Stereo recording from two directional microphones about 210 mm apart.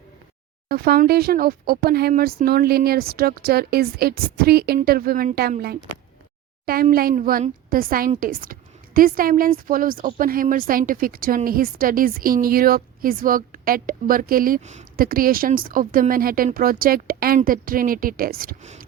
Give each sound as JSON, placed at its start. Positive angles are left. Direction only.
{"t": 0.7, "sound": "speech", "side_deg": -50}
{"t": 6.9, "sound": "a woman's voice", "side_deg": -40}